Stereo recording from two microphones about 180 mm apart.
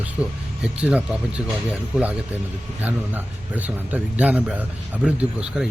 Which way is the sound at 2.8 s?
10° right (ahead or behind).